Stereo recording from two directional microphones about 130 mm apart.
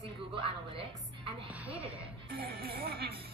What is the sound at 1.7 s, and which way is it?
Speech, 45° right (ahead or behind).